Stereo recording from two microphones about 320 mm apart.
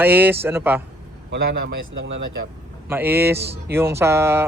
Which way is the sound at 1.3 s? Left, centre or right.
Right.